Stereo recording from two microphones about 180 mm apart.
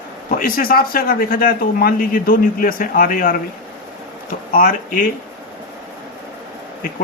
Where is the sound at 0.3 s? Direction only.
55° left (ahead or behind).